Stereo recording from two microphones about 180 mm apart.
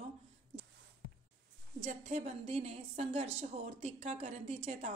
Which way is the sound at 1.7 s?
40° right (ahead or behind).